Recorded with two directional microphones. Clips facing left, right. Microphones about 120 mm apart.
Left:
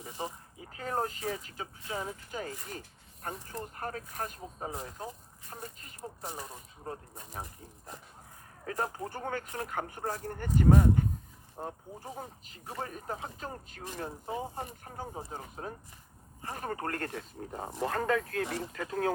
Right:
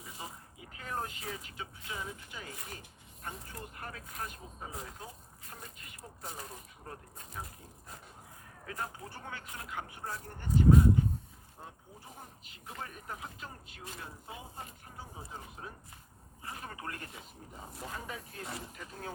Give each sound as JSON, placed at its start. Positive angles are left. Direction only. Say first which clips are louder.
{"t": 0.2, "sound": "speech", "louder": "left 9 dB", "side_deg": 30}
{"t": 8.6, "sound": "speech", "louder": "left 7 dB", "side_deg": 40}
{"t": 11.5, "sound": "speech", "louder": "left 10 dB", "side_deg": 45}
{"t": 17.0, "sound": "speech", "louder": "left 10 dB", "side_deg": 85}